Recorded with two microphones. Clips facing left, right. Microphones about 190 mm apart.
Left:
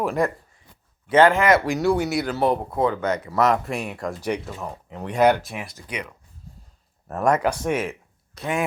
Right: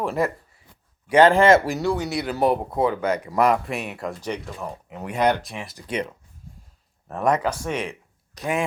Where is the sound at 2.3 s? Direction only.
15° right (ahead or behind).